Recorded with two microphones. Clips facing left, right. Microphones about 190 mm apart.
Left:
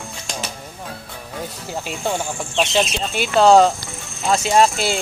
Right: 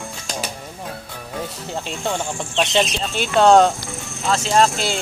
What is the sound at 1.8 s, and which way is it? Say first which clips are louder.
Speech: left 2 dB; 5° left (ahead or behind).